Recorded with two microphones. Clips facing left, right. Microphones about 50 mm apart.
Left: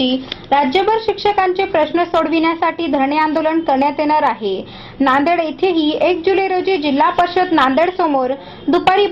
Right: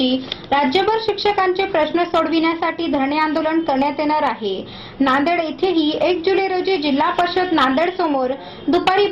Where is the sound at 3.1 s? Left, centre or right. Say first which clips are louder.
Left 3 dB; centre.